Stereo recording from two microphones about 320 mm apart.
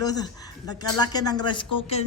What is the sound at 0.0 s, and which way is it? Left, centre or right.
Speech, centre.